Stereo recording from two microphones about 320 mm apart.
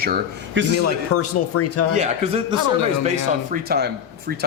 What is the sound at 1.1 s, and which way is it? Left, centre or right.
Speech, left.